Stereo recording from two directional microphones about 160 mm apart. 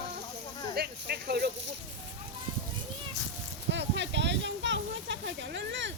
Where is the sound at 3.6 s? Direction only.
90° right.